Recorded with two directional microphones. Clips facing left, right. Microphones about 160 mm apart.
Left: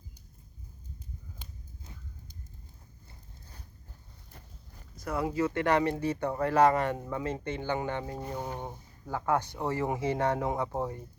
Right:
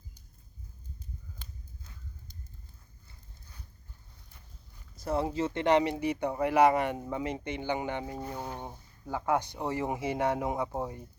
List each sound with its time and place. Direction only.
1.4 s a sound: 15° left (ahead or behind)
4.9 s speech: 30° right (ahead or behind)
8.1 s speech: 15° left (ahead or behind)
9.0 s speech: 15° right (ahead or behind)